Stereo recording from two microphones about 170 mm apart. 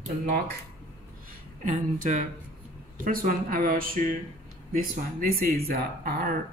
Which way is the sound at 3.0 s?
55° right (ahead or behind).